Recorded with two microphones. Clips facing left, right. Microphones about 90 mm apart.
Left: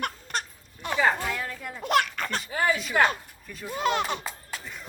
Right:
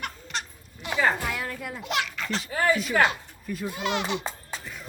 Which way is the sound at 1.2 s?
5° right (ahead or behind).